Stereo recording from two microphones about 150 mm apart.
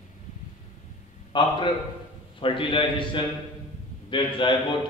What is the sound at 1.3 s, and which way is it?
A man's voice, 35° left (ahead or behind).